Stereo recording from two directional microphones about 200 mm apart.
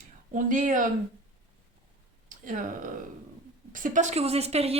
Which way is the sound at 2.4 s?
40° right (ahead or behind).